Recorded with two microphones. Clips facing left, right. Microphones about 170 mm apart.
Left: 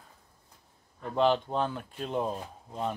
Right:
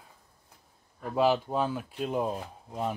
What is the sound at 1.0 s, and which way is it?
Speech, 5° right (ahead or behind).